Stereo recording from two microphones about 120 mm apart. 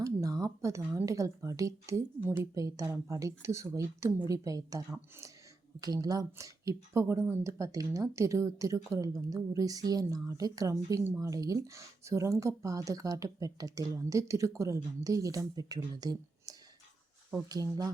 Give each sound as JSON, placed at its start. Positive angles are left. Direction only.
{"t": 0.0, "sound": "a woman's voice", "side_deg": -30}
{"t": 2.6, "sound": "speech", "side_deg": -30}
{"t": 5.8, "sound": "speech", "side_deg": -30}